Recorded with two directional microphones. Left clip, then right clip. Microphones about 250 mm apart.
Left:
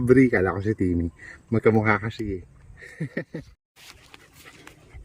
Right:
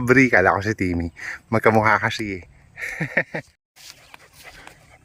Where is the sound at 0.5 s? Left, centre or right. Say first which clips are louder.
Right 4 dB; right.